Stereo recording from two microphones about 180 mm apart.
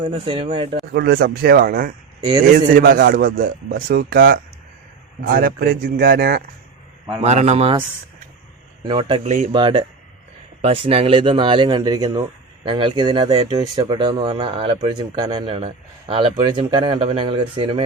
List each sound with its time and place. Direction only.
0.0 s speech: 30° right (ahead or behind)
0.9 s a man's voice: 55° right (ahead or behind)
7.2 s a man's voice: 40° right (ahead or behind)
8.9 s speech: 25° right (ahead or behind)